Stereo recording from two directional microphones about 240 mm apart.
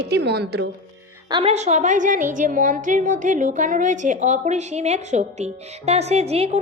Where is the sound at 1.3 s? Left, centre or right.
Right.